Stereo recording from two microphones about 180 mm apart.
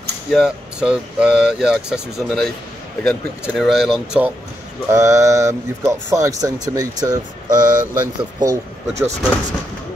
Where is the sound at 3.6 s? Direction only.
Centre (ahead or behind).